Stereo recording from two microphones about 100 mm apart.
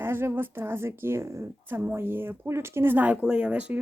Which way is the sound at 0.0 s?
25° right (ahead or behind).